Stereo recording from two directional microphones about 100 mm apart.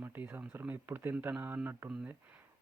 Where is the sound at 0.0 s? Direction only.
20° right (ahead or behind).